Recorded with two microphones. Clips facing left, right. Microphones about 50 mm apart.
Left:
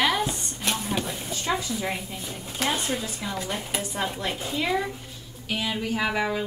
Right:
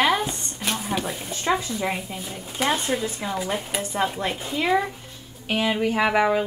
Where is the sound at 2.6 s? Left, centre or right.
Centre.